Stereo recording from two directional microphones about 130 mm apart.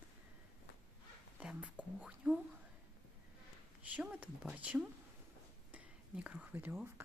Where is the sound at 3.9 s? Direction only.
10° right (ahead or behind).